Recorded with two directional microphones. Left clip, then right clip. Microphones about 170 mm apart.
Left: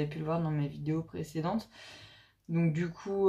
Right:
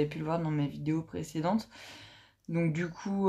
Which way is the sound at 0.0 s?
35° right (ahead or behind).